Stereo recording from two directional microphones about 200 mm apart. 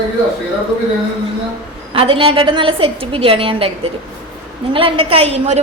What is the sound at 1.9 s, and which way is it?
A woman's voice, 25° right (ahead or behind).